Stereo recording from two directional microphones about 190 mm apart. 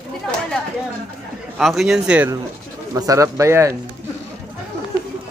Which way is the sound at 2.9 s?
15° right (ahead or behind).